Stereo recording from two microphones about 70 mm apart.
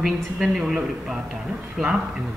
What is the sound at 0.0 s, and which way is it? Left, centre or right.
Speech, centre.